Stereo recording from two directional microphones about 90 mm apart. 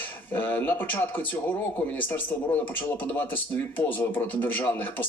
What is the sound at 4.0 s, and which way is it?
Speech, 20° left (ahead or behind).